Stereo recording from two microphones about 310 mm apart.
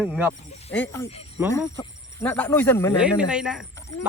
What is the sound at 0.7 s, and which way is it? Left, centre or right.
Speech, centre.